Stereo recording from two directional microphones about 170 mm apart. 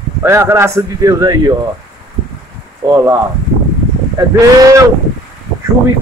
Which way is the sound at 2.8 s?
20° right (ahead or behind).